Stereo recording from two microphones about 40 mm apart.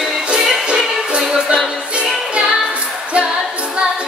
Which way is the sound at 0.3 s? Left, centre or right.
Right.